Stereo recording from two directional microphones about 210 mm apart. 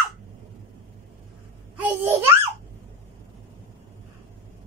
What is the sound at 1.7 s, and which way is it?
Babbling, 10° right (ahead or behind).